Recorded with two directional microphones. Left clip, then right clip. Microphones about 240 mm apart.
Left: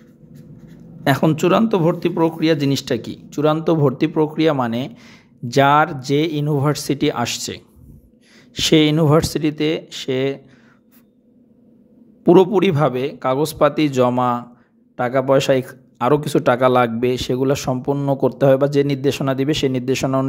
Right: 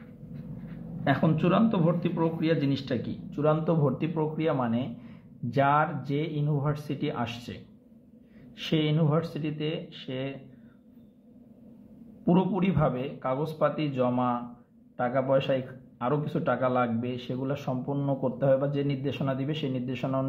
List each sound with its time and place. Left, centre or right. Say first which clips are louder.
1.0 s speech: left 10 dB; left
12.3 s speech: left 15 dB; left